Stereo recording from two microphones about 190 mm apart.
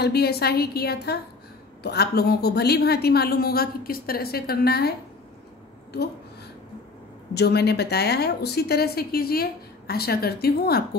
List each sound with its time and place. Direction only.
0.0 s a woman's voice: 55° left (ahead or behind)
7.3 s a woman's voice: 60° left (ahead or behind)